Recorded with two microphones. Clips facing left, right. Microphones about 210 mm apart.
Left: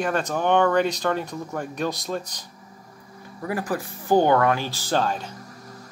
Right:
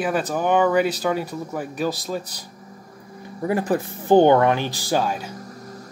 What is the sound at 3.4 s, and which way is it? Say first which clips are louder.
Speech: right 5 dB; 25° right (ahead or behind).